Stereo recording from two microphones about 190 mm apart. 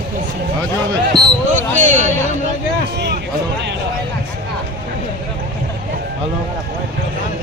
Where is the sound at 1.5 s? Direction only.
40° right (ahead or behind).